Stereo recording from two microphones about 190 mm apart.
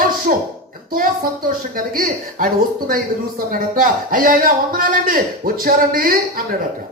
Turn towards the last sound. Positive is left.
turn(degrees=-50)  # may be behind; listen again after turning